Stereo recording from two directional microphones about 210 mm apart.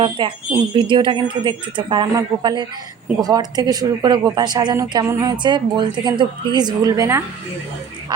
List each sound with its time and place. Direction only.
0.0 s speech: 25° right (ahead or behind)